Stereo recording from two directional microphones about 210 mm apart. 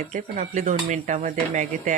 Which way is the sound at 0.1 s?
35° right (ahead or behind).